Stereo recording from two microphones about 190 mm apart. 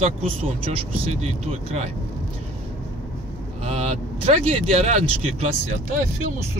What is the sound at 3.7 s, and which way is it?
Speech, 30° right (ahead or behind).